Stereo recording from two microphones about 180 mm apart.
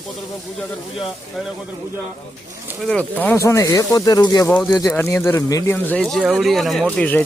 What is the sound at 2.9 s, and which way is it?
Speech, 10° left (ahead or behind).